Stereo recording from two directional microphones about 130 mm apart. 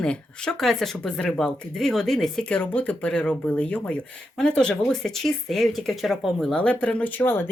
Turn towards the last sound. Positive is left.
turn(degrees=15)  # may be behind; listen again after turning